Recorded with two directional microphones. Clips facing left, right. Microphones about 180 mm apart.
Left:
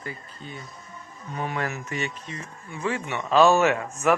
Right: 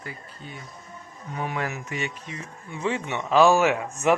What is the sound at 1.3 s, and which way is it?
Speech, 10° right (ahead or behind).